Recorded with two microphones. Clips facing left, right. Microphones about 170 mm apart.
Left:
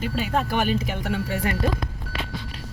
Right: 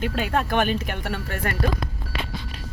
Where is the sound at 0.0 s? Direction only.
60° right (ahead or behind).